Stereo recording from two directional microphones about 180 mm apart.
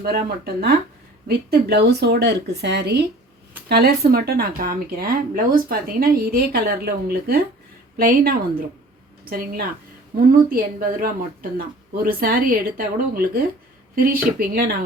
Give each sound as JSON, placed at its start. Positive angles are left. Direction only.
{"t": 0.0, "sound": "speech", "side_deg": -55}